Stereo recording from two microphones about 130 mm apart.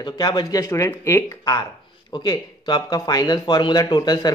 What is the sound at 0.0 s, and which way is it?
A man's voice, 35° left (ahead or behind).